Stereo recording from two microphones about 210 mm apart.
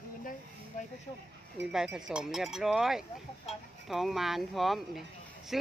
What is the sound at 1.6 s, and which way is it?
Speech, 5° right (ahead or behind).